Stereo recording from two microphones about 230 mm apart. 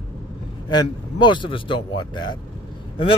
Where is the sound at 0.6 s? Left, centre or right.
Centre.